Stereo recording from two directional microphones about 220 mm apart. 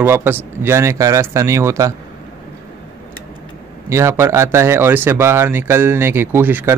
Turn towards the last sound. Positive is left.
turn(degrees=-10)  # may be behind; listen again after turning